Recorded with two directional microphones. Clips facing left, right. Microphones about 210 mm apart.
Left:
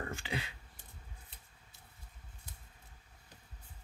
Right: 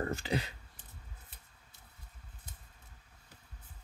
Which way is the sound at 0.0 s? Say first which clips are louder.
Right 6 dB; 40° right (ahead or behind).